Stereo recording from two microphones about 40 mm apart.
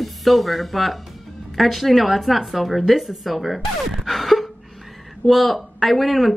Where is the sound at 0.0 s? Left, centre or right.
Centre.